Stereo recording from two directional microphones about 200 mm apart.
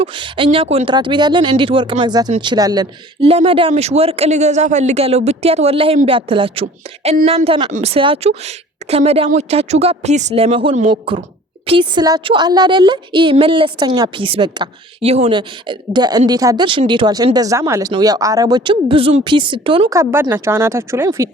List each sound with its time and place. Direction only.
0.0 s a woman's voice: 25° right (ahead or behind)